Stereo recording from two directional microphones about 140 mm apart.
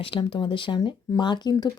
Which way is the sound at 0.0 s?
35° left (ahead or behind).